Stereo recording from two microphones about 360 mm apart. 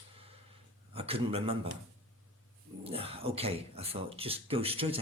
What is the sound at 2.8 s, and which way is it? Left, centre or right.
Speech, centre.